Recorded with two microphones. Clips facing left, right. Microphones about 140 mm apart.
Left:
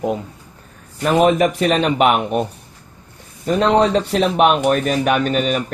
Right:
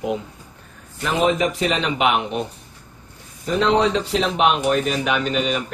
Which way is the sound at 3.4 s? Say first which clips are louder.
Left 3 dB; 50° left (ahead or behind).